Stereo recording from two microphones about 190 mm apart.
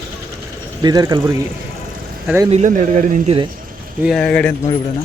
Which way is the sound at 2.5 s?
40° right (ahead or behind).